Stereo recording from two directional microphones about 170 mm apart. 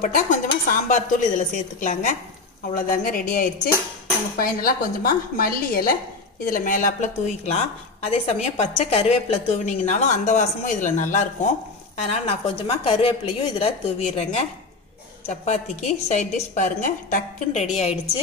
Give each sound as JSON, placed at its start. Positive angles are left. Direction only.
{"t": 0.0, "sound": "a woman's voice", "side_deg": 50}
{"t": 12.0, "sound": "a woman's voice", "side_deg": 35}